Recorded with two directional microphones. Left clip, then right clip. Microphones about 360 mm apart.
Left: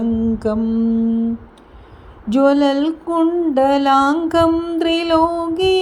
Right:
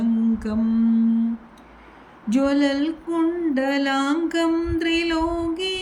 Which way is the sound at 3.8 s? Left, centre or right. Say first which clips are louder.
Left 9 dB; left.